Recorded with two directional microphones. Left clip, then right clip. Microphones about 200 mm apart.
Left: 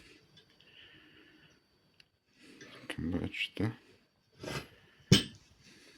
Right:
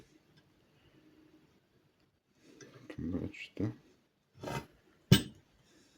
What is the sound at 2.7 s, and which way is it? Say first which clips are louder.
Speech: left 3 dB; centre (ahead or behind).